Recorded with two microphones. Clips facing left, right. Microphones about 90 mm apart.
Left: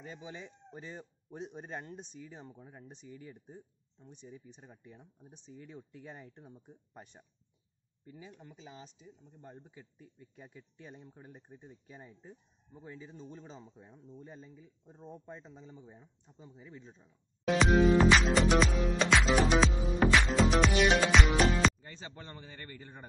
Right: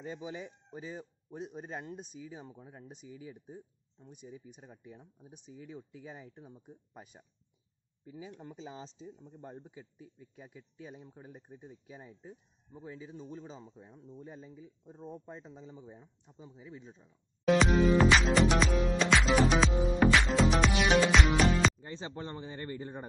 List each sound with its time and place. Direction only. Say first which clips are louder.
0.0 s speech: right 5 dB; 20° right (ahead or behind)
8.4 s a man's voice: right 5 dB; 25° right (ahead or behind); by 19.7 s centre (ahead or behind)
20.0 s music: even; centre (ahead or behind)
21.8 s a man's voice: right 7 dB; 25° right (ahead or behind)